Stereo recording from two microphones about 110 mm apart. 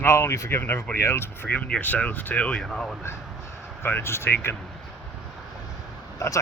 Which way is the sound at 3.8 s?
20° left (ahead or behind).